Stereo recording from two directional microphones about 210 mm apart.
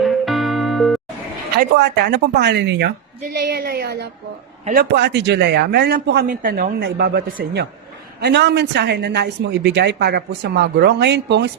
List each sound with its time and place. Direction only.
0.0 s music: centre (ahead or behind)
1.5 s a woman's voice: 50° right (ahead or behind)